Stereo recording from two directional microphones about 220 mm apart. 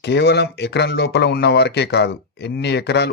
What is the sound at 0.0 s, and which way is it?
Speech, 50° left (ahead or behind).